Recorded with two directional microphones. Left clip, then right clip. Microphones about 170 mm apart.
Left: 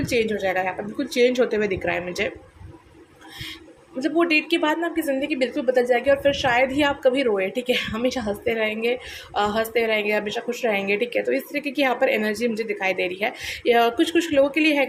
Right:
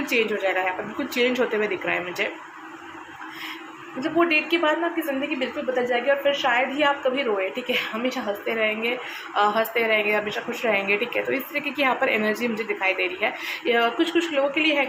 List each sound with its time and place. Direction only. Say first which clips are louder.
0.0 s a woman's voice: even; 30° left (ahead or behind)
4.0 s a woman's voice: left 1 dB; 40° left (ahead or behind)